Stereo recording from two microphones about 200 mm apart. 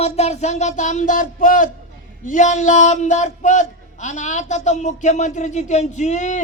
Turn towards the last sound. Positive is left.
turn(degrees=35)  # may be behind; listen again after turning